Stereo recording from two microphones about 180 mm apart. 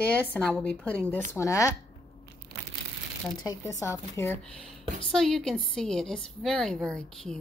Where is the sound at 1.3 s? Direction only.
15° left (ahead or behind).